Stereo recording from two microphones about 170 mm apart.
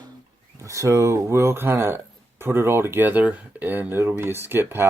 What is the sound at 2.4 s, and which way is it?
Speech, 15° right (ahead or behind).